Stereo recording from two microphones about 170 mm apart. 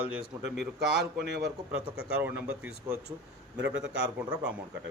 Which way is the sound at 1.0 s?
85° right.